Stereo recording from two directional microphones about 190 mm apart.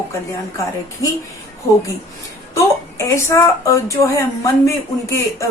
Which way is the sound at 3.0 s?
15° left (ahead or behind).